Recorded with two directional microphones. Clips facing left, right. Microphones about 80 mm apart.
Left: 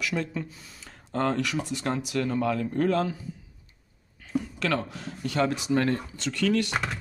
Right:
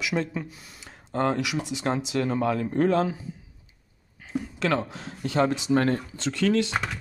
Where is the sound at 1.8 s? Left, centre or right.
Right.